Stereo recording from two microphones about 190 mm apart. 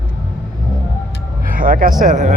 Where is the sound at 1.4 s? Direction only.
45° right (ahead or behind).